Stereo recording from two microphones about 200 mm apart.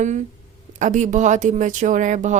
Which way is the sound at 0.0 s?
35° right (ahead or behind).